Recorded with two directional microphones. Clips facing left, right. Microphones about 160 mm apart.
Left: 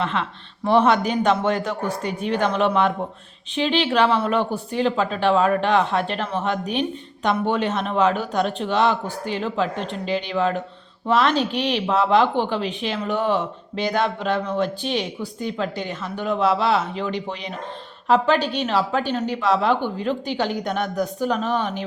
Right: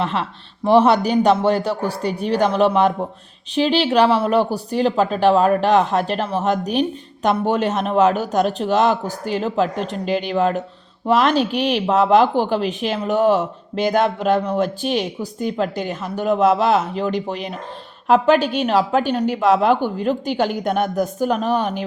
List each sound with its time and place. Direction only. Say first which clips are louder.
0.0 s speech: right 2 dB; 35° right (ahead or behind)
11.5 s speech: right 4 dB; 45° right (ahead or behind)